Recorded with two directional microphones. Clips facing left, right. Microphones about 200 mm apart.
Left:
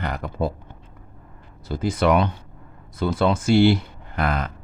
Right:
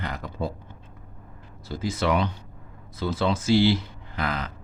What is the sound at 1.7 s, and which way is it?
A man's voice, 55° left (ahead or behind).